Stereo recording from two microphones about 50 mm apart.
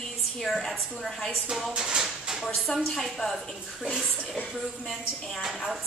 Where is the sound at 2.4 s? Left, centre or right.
Centre.